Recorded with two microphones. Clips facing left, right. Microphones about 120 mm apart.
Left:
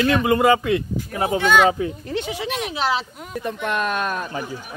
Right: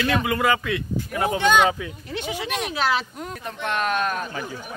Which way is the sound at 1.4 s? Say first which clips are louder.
Left 1 dB; 5° left (ahead or behind).